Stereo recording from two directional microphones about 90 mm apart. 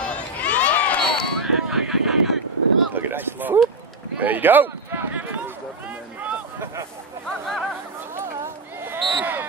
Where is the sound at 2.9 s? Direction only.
20° right (ahead or behind).